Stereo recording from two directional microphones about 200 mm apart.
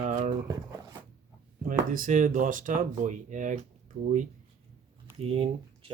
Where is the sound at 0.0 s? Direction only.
40° right (ahead or behind).